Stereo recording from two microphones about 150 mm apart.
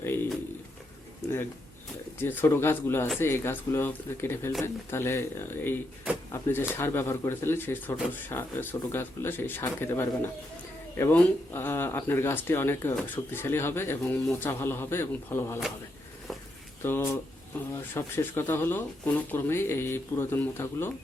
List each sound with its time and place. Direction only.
0.0 s a sound: 15° left (ahead or behind)
2.1 s speech: 15° left (ahead or behind)
16.8 s speech: 15° left (ahead or behind)